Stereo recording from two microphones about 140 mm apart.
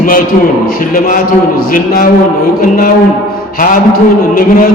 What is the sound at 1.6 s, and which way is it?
Speech, 90° left.